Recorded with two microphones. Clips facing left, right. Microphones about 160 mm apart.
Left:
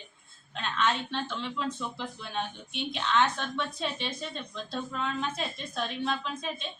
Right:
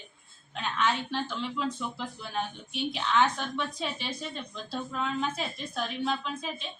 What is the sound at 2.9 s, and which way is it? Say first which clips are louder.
A woman's voice: even; 5° right (ahead or behind).